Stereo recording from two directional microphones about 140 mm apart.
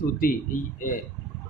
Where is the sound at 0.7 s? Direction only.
75° left (ahead or behind).